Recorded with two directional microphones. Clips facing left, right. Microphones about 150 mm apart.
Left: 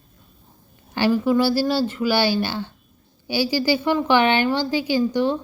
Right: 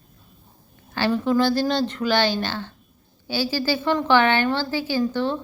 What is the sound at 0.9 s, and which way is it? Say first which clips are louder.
A woman's voice: left 2 dB; 10° left (ahead or behind).